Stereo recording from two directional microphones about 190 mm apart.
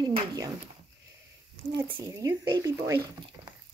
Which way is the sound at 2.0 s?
15° right (ahead or behind).